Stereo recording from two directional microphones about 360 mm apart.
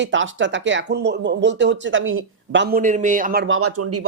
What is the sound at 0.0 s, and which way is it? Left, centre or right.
Speech, right.